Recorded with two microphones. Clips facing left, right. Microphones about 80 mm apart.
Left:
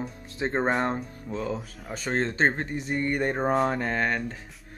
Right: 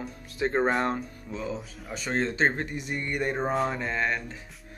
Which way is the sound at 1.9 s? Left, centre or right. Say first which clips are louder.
Left 1 dB; left.